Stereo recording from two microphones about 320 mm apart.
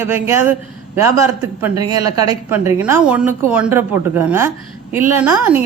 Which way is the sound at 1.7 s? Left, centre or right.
Right.